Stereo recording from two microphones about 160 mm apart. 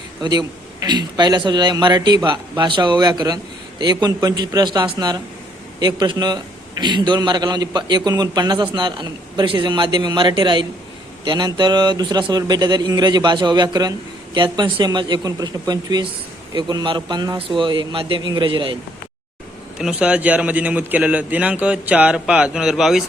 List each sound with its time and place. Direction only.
0.2 s a man's voice: 25° right (ahead or behind)
19.8 s a man's voice: 10° right (ahead or behind)